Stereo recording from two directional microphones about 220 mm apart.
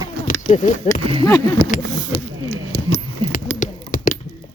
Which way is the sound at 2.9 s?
35° left (ahead or behind).